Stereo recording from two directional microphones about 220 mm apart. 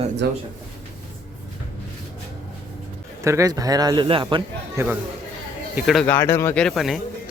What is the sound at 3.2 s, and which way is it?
Speech, 15° right (ahead or behind).